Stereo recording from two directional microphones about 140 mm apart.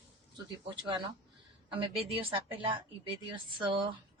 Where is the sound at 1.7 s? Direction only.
40° right (ahead or behind).